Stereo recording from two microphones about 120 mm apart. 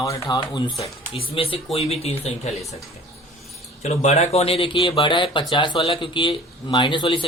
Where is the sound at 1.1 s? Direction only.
50° left (ahead or behind).